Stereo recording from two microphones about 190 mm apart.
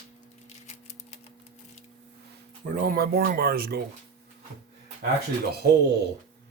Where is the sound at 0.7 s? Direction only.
35° left (ahead or behind).